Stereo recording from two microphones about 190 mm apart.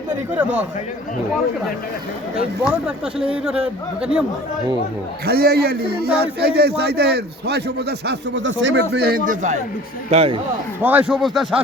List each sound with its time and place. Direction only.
3.3 s a man's voice: 5° right (ahead or behind)
5.2 s a man's voice: 55° right (ahead or behind)
10.1 s a man's voice: 30° right (ahead or behind)
10.8 s a man's voice: 5° right (ahead or behind)